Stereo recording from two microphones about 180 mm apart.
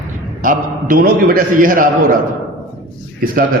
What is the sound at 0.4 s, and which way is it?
A man's voice, 50° right (ahead or behind).